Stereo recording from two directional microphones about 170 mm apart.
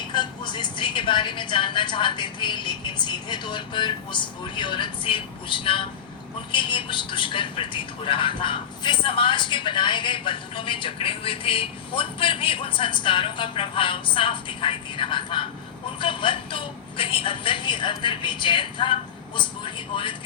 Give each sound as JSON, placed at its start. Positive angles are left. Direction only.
{"t": 0.0, "sound": "speech", "side_deg": 25}